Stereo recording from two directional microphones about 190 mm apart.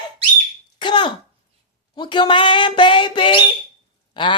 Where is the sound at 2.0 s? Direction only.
25° left (ahead or behind).